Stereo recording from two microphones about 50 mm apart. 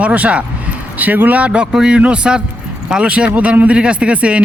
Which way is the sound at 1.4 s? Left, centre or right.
Right.